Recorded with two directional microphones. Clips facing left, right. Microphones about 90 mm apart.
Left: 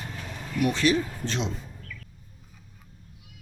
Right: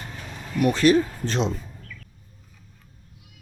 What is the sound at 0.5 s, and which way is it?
Speech, 45° right (ahead or behind).